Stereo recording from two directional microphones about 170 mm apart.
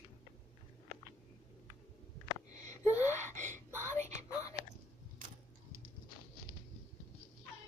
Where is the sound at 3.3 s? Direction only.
45° right (ahead or behind).